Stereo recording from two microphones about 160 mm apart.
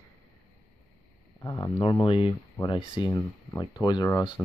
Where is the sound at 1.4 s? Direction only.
25° left (ahead or behind).